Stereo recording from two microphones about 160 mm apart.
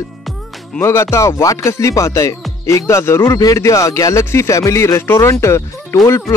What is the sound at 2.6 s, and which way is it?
Speech, 20° left (ahead or behind).